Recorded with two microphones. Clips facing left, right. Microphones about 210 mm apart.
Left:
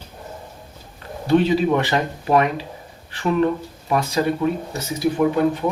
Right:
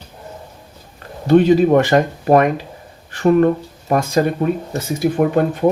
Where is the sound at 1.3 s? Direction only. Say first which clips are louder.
Right 6 dB; 45° right (ahead or behind).